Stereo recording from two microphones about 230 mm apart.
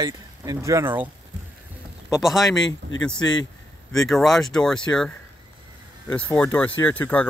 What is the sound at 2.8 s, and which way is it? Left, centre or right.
Speech, right.